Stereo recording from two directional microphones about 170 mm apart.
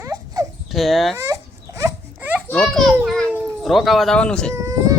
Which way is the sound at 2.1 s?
10° right (ahead or behind).